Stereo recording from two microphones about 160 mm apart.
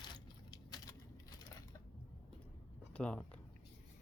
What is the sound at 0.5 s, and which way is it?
Typing, 25° left (ahead or behind).